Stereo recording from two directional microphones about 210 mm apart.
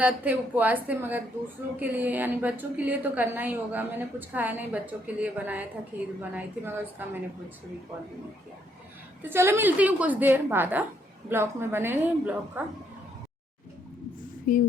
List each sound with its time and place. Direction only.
0.0 s a woman's voice: 10° right (ahead or behind)
9.3 s a woman's voice: 10° right (ahead or behind)
14.5 s a sound: 40° left (ahead or behind)